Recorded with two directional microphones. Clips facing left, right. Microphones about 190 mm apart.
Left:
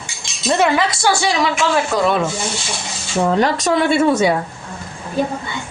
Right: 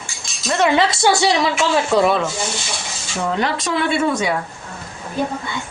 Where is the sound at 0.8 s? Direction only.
25° right (ahead or behind).